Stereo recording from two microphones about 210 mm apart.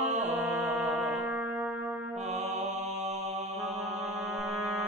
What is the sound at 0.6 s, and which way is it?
Music, 10° right (ahead or behind).